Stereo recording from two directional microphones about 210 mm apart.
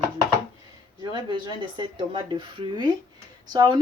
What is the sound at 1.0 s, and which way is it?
A woman's voice, 20° right (ahead or behind).